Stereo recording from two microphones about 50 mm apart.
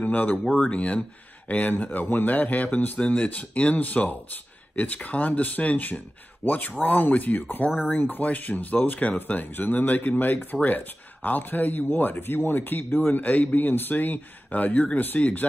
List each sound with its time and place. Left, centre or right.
0.0 s speech: left
3.0 s speech: left